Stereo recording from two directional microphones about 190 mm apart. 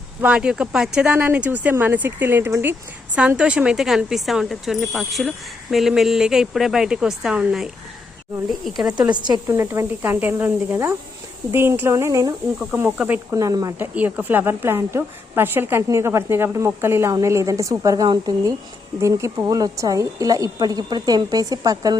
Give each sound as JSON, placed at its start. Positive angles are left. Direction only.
{"t": 0.2, "sound": "a woman's voice", "side_deg": -5}
{"t": 9.1, "sound": "a woman's voice", "side_deg": -20}